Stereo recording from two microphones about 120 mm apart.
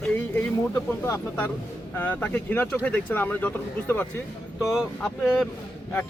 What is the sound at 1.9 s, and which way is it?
Speech, 15° left (ahead or behind).